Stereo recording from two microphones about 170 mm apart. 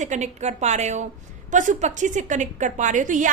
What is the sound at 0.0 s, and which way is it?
A woman's voice, 45° right (ahead or behind).